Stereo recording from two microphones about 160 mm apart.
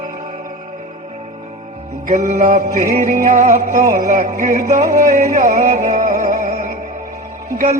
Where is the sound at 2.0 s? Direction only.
50° right (ahead or behind).